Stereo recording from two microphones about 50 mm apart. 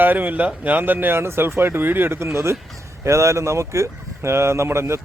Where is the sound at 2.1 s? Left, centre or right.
Right.